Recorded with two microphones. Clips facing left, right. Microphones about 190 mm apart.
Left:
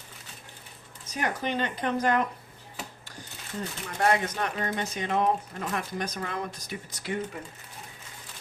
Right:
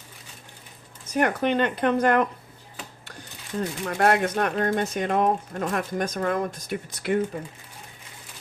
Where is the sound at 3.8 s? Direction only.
60° right (ahead or behind).